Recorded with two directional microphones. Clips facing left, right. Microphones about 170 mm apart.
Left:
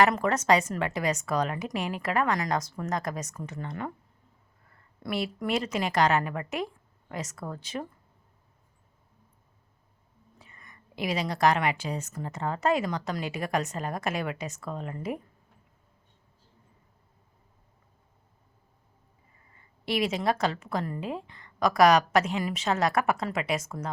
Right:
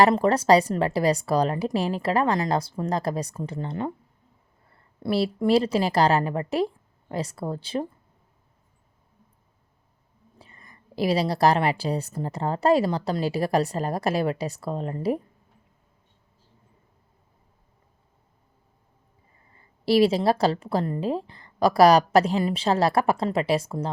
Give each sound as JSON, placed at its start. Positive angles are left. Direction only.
{"t": 0.0, "sound": "a woman's voice", "side_deg": -30}
{"t": 10.3, "sound": "a woman's voice", "side_deg": -30}
{"t": 19.5, "sound": "a woman's voice", "side_deg": -35}